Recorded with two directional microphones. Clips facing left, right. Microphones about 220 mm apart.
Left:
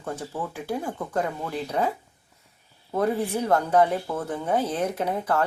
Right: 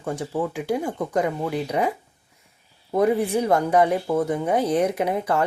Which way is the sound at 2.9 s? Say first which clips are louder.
Right 5 dB; 15° right (ahead or behind).